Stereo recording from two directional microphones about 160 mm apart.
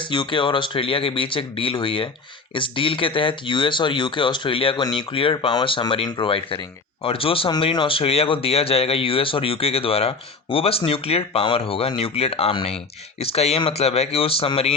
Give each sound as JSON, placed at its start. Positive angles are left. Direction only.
{"t": 0.0, "sound": "speech", "side_deg": 30}